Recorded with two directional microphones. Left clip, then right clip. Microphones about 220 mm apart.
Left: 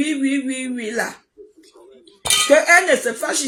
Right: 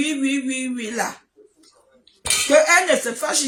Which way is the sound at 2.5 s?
15° right (ahead or behind).